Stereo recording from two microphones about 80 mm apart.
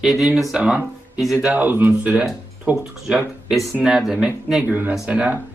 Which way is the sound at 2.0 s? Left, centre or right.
Centre.